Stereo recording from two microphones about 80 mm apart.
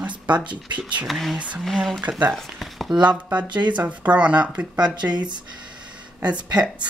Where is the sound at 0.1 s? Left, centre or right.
Right.